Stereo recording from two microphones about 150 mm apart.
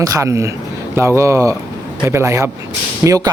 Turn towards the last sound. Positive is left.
turn(degrees=-20)  # may be behind; listen again after turning